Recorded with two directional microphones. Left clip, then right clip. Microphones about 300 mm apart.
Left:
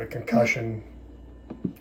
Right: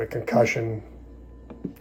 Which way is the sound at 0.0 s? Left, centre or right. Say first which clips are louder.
Right 2 dB; right.